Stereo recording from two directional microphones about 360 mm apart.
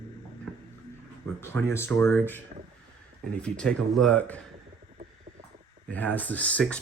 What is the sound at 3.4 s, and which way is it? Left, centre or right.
Speech, centre.